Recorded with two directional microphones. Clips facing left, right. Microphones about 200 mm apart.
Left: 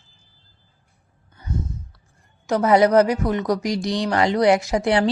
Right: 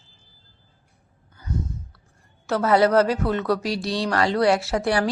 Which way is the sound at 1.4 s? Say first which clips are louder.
Left 1 dB; 20° left (ahead or behind).